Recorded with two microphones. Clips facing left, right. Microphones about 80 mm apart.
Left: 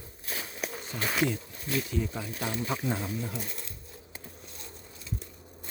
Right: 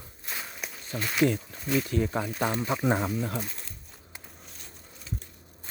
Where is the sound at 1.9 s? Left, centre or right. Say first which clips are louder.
Right 5 dB; right.